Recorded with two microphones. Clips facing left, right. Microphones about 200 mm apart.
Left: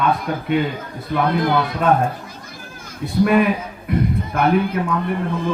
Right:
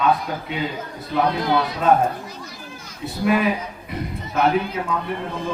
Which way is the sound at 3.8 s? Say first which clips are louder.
Left 12 dB; 55° left (ahead or behind).